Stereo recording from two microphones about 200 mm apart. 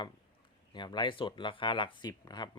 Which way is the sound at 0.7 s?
20° left (ahead or behind).